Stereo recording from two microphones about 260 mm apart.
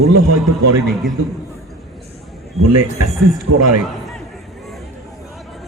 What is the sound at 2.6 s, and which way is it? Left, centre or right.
Speech, right.